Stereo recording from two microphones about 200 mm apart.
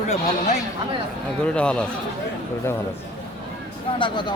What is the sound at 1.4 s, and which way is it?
Speech, 5° left (ahead or behind).